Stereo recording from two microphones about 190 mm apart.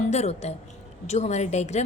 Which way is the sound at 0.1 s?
35° left (ahead or behind).